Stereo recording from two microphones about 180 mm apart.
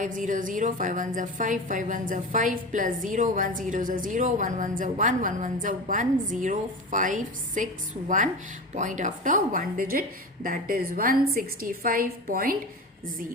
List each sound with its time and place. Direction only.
0.0 s a woman's voice: 45° right (ahead or behind)